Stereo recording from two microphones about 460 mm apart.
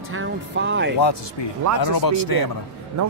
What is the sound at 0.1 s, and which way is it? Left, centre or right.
Speech, right.